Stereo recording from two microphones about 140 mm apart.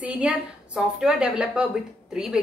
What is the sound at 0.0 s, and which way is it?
A woman's voice, 10° right (ahead or behind).